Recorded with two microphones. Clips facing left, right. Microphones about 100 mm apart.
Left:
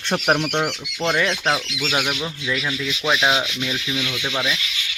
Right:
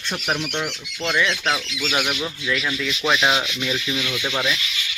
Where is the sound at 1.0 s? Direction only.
35° left (ahead or behind).